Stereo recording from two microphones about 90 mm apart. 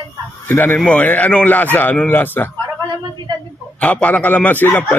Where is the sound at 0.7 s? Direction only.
10° left (ahead or behind).